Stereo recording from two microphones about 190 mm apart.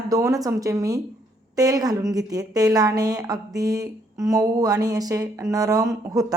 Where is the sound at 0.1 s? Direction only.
15° right (ahead or behind).